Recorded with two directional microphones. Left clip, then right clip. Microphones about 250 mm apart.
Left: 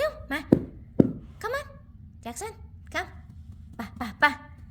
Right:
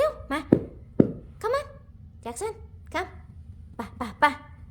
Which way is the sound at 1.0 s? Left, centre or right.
Left.